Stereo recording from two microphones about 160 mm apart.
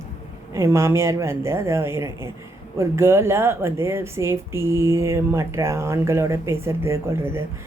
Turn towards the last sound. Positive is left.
turn(degrees=-15)  # may be behind; listen again after turning